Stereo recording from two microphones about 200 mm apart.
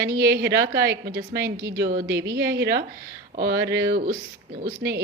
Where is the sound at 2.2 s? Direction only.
60° right (ahead or behind).